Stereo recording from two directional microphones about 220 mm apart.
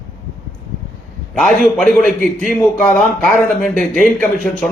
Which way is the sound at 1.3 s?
Centre (ahead or behind).